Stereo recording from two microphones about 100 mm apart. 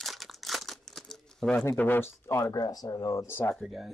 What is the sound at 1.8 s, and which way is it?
Speech, 20° left (ahead or behind).